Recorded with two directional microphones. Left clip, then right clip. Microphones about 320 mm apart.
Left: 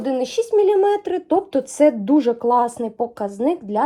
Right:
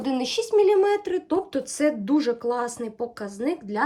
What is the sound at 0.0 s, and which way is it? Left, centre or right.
A woman's voice, centre.